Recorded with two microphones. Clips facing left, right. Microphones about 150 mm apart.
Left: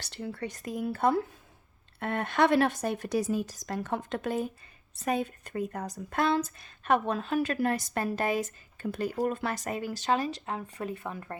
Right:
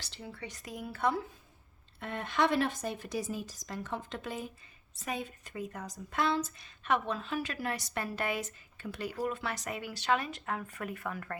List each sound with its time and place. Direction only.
0.0 s speech: 60° left (ahead or behind)
2.0 s speech: 65° left (ahead or behind); by 11.3 s 25° left (ahead or behind)